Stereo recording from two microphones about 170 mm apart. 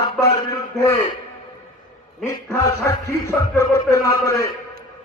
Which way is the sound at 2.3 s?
20° left (ahead or behind).